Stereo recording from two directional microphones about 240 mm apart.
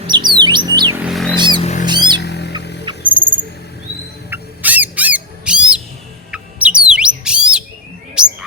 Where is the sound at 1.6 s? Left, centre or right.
Left.